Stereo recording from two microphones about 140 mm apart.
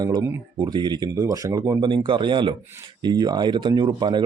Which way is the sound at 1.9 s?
35° right (ahead or behind).